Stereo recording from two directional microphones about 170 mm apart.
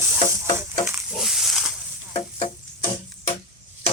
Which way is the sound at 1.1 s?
Centre (ahead or behind).